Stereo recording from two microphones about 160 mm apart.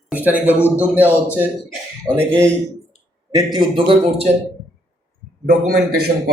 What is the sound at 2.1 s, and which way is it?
Speech, 25° right (ahead or behind).